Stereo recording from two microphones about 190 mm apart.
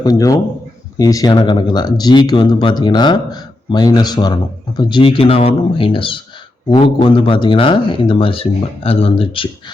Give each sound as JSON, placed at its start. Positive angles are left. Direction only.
{"t": 0.0, "sound": "speech", "side_deg": 20}